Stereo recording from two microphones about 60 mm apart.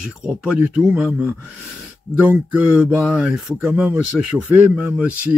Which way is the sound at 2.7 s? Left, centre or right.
Right.